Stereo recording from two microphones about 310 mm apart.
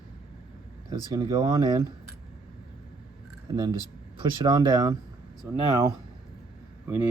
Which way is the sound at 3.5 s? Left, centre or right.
Centre.